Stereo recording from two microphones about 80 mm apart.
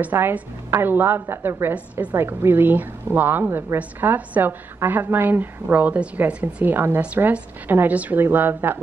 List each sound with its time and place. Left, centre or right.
0.0 s a woman's voice: right